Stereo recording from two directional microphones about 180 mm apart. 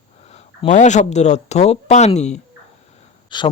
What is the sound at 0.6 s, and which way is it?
Speech, 40° left (ahead or behind).